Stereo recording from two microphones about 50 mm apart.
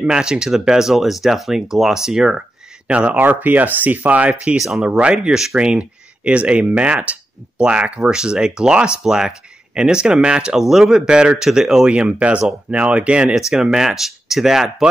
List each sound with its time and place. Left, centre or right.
0.0 s speech: centre
2.9 s speech: right
3.2 s speech: right
4.6 s speech: centre
4.8 s speech: right
11.9 s speech: right
13.5 s speech: centre